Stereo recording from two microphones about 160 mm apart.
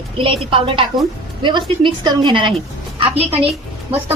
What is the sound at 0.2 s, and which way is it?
A woman's voice, 35° right (ahead or behind).